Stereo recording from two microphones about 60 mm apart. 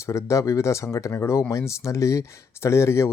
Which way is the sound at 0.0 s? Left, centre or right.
Left.